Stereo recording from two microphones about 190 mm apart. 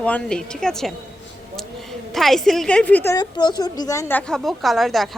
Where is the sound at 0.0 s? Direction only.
5° left (ahead or behind).